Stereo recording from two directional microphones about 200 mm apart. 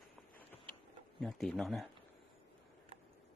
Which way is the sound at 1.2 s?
Centre (ahead or behind).